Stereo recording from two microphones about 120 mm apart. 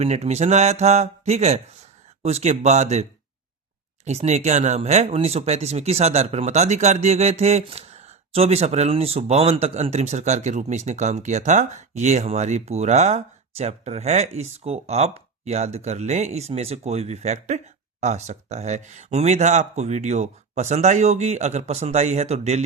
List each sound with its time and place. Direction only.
0.0 s speech: 65° right (ahead or behind)